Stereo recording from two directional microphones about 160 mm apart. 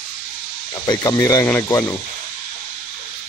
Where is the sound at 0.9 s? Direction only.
20° left (ahead or behind).